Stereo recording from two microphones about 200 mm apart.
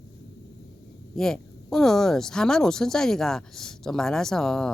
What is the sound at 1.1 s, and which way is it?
Speech, centre (ahead or behind).